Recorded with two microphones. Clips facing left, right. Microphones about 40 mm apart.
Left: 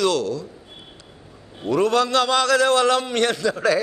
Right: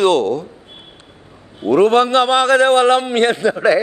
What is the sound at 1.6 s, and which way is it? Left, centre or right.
A man's voice, right.